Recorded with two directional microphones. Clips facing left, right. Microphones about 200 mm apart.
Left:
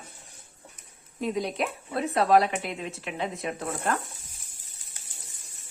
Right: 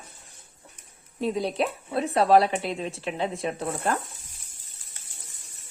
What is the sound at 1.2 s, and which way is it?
Speech, 30° right (ahead or behind).